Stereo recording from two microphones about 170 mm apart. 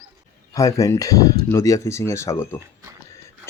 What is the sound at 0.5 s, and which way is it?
Speech, 20° left (ahead or behind).